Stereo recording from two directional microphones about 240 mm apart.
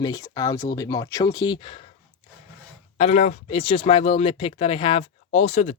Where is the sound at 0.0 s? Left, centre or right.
Centre.